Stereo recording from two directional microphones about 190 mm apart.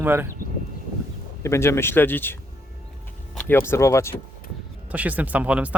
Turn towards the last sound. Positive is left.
turn(degrees=-5)  # may be behind; listen again after turning